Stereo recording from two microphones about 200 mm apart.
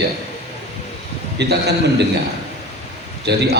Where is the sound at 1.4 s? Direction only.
55° right (ahead or behind).